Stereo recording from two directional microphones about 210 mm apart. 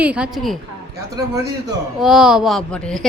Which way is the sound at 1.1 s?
15° right (ahead or behind).